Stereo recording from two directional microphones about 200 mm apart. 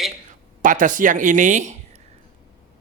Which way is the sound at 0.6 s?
40° right (ahead or behind).